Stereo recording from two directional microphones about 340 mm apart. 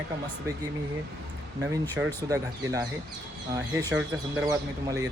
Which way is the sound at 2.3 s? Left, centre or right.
Centre.